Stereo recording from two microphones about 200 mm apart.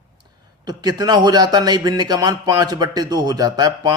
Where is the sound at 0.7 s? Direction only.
20° right (ahead or behind).